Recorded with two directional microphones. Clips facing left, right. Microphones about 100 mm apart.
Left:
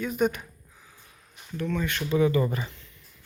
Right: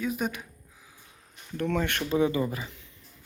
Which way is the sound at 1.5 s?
65° right (ahead or behind).